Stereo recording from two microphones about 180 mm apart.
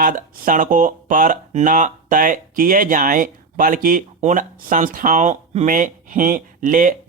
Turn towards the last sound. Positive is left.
turn(degrees=-50)  # may be behind; listen again after turning